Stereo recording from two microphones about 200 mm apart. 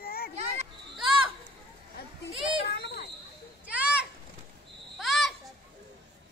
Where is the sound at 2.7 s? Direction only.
55° left (ahead or behind).